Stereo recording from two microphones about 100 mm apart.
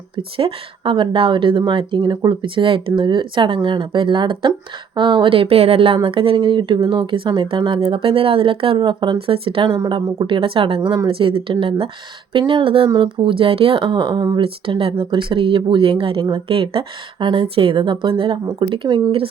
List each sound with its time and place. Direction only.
0.2 s speech: 65° right (ahead or behind); by 14.3 s 50° right (ahead or behind)
14.3 s speech: 60° right (ahead or behind)